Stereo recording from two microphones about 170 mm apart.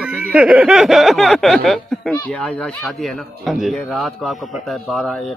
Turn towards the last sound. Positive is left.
turn(degrees=0)  # may be behind; listen again after turning